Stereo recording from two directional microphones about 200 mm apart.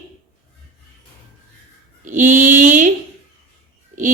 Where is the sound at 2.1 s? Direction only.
40° right (ahead or behind).